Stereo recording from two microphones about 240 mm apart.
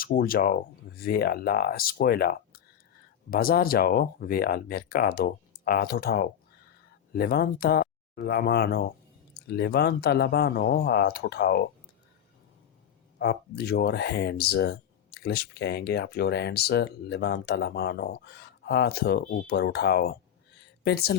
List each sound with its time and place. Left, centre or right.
0.0 s speech: left
13.1 s speech: left